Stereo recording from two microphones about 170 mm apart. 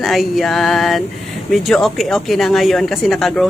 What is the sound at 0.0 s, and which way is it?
A woman's voice, centre (ahead or behind).